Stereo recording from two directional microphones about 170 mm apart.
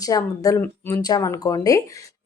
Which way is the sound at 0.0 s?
20° left (ahead or behind).